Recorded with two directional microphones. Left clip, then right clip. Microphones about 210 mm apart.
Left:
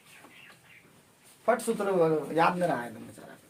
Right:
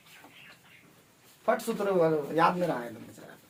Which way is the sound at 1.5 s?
15° left (ahead or behind).